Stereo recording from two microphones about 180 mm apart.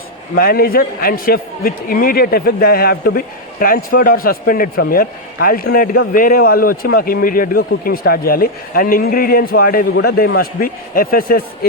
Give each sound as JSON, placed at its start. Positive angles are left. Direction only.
{"t": 0.3, "sound": "a man's voice", "side_deg": 55}